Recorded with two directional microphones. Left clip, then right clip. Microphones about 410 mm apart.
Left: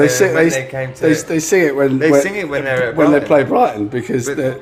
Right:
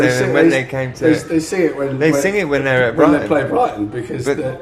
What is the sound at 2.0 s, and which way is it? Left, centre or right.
Speech, right.